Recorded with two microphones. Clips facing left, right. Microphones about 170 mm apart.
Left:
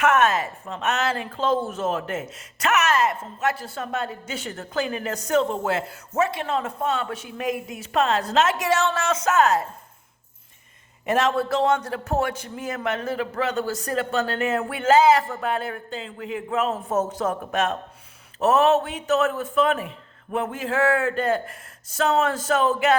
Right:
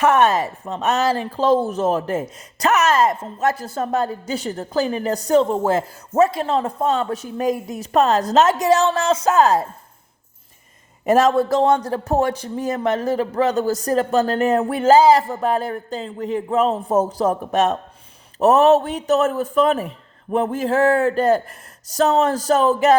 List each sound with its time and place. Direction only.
0.0 s speech: 35° right (ahead or behind)
11.0 s speech: 40° right (ahead or behind)